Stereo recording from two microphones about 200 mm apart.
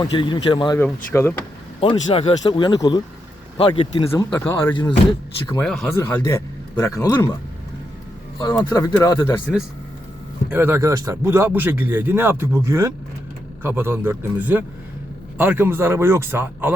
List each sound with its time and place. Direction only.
0.0 s speech: 25° left (ahead or behind)
1.1 s speech: 10° left (ahead or behind)
1.8 s speech: 30° left (ahead or behind)
4.1 s speech: 10° left (ahead or behind)
4.7 s speech: 25° left (ahead or behind)
5.5 s speech: centre (ahead or behind)
5.9 s speech: 10° left (ahead or behind)
8.4 s speech: 20° left (ahead or behind)
10.5 s speech: 10° right (ahead or behind)